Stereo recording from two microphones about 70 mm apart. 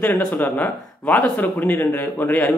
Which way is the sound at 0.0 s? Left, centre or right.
Left.